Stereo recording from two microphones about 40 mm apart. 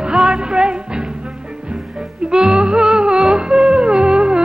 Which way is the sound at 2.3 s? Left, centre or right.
Right.